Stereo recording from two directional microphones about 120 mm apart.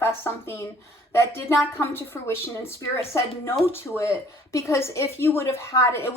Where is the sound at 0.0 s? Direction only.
20° left (ahead or behind).